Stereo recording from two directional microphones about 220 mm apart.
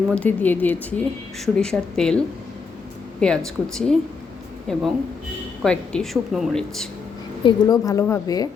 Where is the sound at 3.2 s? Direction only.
5° left (ahead or behind).